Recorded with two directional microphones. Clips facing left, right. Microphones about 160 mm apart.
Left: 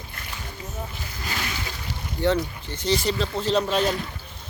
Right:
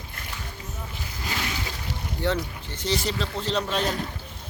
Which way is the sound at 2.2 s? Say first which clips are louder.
Left 4 dB; centre (ahead or behind).